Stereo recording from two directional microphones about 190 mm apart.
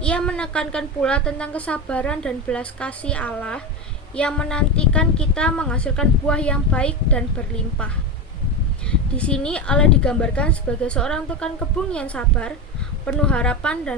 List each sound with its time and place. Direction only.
0.0 s a woman's voice: 5° left (ahead or behind)
8.9 s a woman's voice: 5° left (ahead or behind)